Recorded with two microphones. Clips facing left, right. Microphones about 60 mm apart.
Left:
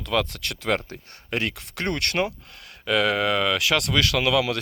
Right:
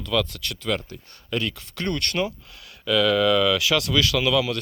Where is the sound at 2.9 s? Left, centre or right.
Left.